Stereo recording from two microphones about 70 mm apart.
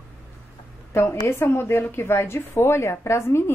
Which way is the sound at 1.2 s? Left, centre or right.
Left.